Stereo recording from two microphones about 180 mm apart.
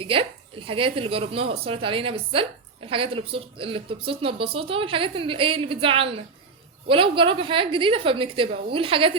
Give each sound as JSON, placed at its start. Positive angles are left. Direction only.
{"t": 0.0, "sound": "a woman's voice", "side_deg": -30}